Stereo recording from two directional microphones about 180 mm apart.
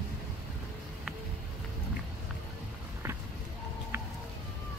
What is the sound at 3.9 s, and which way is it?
Music, 15° right (ahead or behind).